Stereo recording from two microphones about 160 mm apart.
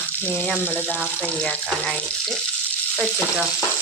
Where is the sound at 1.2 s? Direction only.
5° left (ahead or behind).